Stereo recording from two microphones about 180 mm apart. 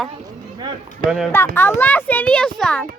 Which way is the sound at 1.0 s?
50° right (ahead or behind).